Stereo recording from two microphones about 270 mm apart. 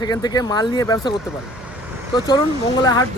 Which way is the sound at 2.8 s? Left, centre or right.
Centre.